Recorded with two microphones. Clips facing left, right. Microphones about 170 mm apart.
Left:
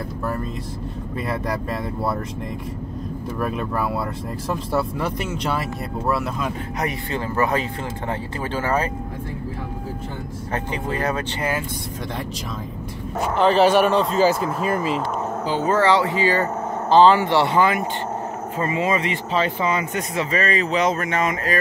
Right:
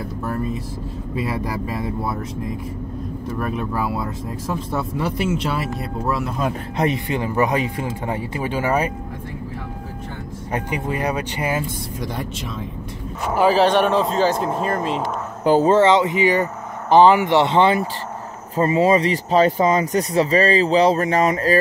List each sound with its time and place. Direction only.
3.7 s speech: centre (ahead or behind)
6.8 s speech: 20° right (ahead or behind)
10.5 s speech: 10° right (ahead or behind)
13.4 s speech: 5° right (ahead or behind)
15.6 s speech: 25° right (ahead or behind)